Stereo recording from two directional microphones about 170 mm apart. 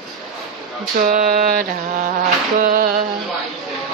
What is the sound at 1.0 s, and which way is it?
Mantra, 55° right (ahead or behind).